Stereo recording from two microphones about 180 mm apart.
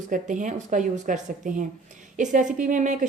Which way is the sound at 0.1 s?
45° right (ahead or behind).